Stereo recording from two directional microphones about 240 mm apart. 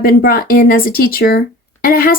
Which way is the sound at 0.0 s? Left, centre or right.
Left.